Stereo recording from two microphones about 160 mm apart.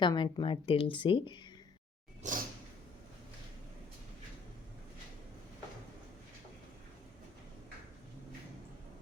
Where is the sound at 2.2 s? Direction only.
50° right (ahead or behind).